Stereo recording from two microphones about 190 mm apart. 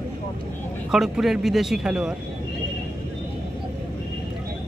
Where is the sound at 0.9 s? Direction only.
Centre (ahead or behind).